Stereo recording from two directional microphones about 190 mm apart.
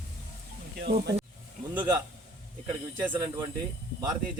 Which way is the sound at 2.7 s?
10° right (ahead or behind).